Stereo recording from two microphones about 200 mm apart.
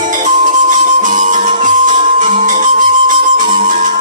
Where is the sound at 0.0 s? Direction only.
40° right (ahead or behind).